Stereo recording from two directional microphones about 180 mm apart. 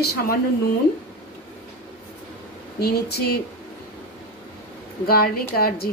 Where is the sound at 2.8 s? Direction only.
60° left (ahead or behind).